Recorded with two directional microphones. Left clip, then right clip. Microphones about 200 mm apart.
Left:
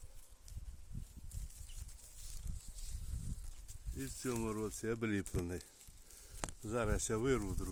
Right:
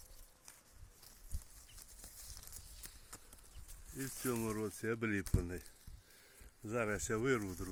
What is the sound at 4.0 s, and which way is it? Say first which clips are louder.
Speech: right 1 dB; 5° left (ahead or behind).